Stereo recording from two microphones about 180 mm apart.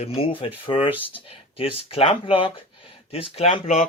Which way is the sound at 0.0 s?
30° left (ahead or behind).